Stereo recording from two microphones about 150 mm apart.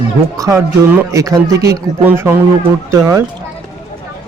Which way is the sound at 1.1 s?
20° right (ahead or behind).